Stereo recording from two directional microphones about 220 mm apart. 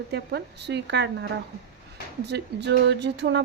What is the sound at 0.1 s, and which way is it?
Speech, 50° right (ahead or behind).